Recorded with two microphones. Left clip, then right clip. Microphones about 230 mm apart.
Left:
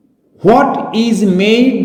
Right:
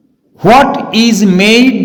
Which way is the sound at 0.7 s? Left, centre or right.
Right.